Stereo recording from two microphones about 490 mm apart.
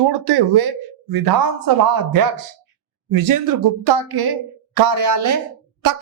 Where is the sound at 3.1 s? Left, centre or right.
Right.